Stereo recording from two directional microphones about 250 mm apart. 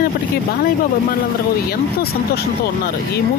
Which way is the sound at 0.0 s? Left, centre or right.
Left.